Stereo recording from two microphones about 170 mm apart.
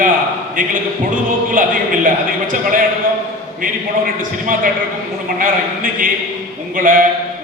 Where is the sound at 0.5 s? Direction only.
55° right (ahead or behind).